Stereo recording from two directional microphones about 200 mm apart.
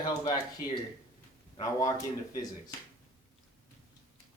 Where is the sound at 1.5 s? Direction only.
15° left (ahead or behind).